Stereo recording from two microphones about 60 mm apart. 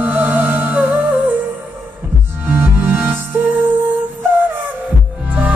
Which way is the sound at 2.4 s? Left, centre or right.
Right.